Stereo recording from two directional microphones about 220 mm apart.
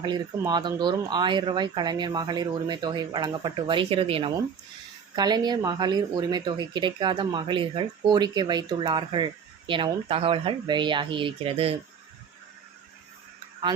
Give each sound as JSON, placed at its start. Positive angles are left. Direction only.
{"t": 0.0, "sound": "speech", "side_deg": -20}